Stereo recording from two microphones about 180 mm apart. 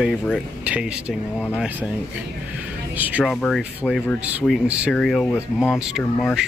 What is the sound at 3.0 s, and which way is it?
Speech, 10° right (ahead or behind).